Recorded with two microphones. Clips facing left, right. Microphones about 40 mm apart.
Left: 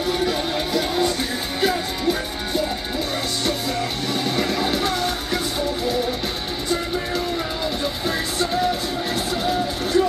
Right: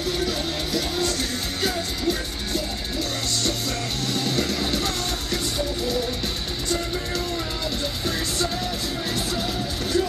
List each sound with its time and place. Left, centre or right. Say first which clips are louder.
0.0 s music: left 4 dB; centre
4.1 s music: left 2 dB; centre
9.4 s music: left 5 dB; centre